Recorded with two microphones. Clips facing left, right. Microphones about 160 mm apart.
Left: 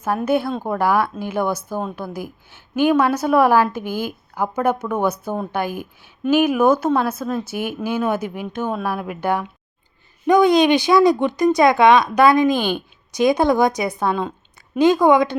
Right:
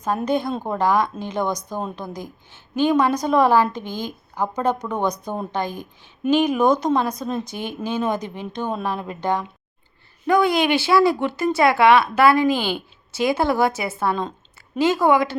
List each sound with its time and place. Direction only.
0.0 s speech: 5° left (ahead or behind)